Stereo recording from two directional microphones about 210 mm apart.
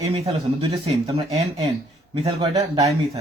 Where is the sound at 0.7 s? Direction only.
30° right (ahead or behind).